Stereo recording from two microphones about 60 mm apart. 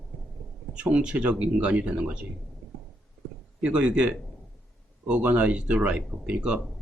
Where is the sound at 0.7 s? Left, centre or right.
Centre.